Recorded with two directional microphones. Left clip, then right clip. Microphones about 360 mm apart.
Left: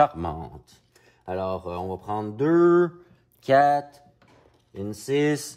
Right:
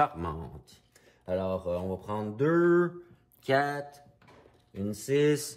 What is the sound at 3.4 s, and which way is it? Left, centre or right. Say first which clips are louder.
Speech: left 9 dB; left.